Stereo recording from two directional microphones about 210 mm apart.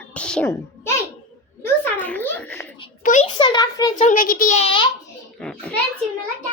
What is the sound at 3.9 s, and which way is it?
Speech, 35° left (ahead or behind).